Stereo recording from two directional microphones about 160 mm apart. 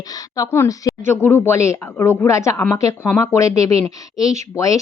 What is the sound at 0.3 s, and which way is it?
Speech, 20° left (ahead or behind).